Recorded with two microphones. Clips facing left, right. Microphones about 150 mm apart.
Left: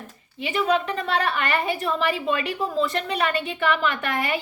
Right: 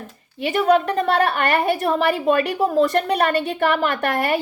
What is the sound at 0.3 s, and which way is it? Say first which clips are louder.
A woman's voice: right 6 dB; 45° right (ahead or behind).